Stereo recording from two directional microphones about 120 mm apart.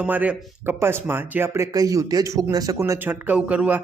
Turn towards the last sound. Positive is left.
turn(degrees=-10)  # may be behind; listen again after turning